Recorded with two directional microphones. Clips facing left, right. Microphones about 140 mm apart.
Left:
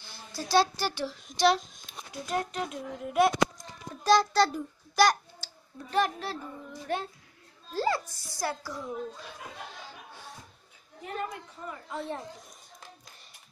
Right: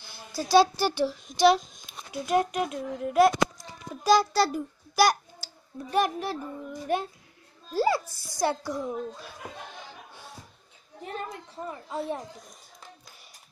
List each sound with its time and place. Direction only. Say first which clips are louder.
0.3 s a child's voice: right 5 dB; 5° right (ahead or behind)
2.7 s a child's voice: right 4 dB; centre (ahead or behind); by 8.9 s 25° right (ahead or behind)
11.5 s a child's voice: right 4 dB; 25° right (ahead or behind)